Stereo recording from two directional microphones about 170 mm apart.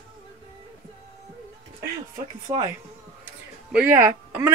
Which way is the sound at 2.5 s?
25° right (ahead or behind).